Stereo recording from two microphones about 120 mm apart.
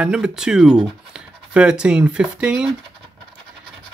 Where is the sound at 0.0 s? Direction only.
5° right (ahead or behind).